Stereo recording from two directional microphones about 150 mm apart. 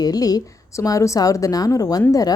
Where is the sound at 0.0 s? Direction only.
25° left (ahead or behind).